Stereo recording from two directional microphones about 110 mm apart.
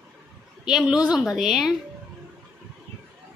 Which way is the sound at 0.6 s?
5° right (ahead or behind).